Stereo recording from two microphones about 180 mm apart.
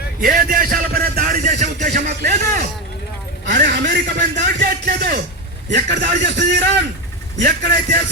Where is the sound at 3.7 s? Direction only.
70° right (ahead or behind).